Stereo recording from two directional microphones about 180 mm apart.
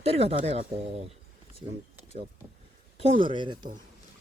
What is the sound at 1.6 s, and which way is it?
Speech, 35° right (ahead or behind).